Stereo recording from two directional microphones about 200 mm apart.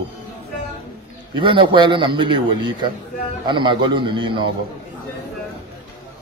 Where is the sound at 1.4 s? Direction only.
25° right (ahead or behind).